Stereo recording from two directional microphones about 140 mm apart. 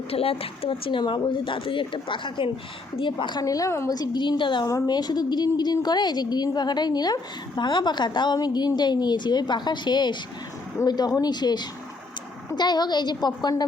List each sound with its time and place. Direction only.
0.1 s a woman's voice: 45° left (ahead or behind)